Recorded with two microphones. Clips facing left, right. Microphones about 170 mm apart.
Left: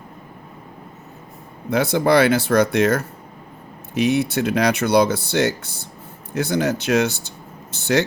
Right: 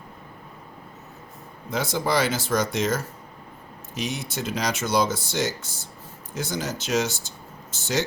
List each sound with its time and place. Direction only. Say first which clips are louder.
1.7 s speech: left 8 dB; 60° left (ahead or behind)